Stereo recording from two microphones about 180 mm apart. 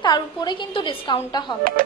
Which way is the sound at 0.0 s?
25° left (ahead or behind).